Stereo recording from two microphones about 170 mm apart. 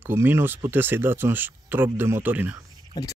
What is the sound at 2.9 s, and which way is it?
Speech, 20° left (ahead or behind).